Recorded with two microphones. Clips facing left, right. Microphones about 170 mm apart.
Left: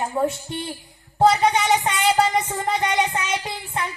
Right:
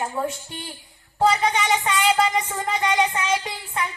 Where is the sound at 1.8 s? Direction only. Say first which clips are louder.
Left 1 dB; 30° left (ahead or behind).